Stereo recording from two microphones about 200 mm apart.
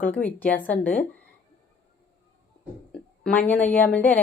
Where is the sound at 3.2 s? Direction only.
5° left (ahead or behind).